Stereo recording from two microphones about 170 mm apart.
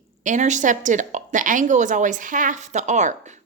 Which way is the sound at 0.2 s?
45° right (ahead or behind).